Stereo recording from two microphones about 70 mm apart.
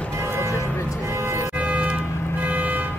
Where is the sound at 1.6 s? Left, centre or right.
Centre.